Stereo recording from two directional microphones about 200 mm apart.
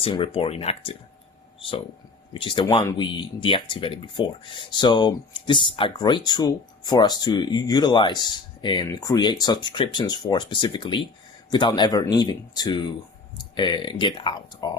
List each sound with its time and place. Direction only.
0.0 s speech: 25° left (ahead or behind)
2.3 s speech: 25° left (ahead or behind)